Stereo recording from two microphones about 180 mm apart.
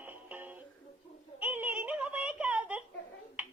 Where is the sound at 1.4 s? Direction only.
10° right (ahead or behind).